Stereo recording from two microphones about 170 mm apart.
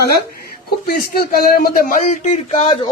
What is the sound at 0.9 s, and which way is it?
Speech, 60° left (ahead or behind).